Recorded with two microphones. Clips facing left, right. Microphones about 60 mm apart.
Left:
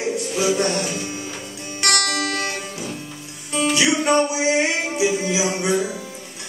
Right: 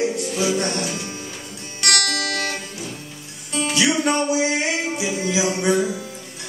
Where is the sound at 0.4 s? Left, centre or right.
Left.